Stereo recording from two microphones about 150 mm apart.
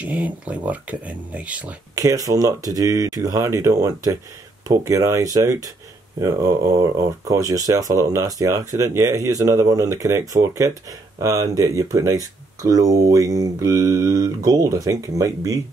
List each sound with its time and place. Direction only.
0.0 s speech: 10° right (ahead or behind)
2.0 s speech: 20° right (ahead or behind)